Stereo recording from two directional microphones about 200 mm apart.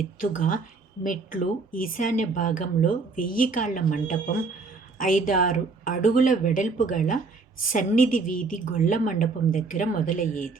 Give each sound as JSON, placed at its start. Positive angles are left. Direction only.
{"t": 0.2, "sound": "speech", "side_deg": 40}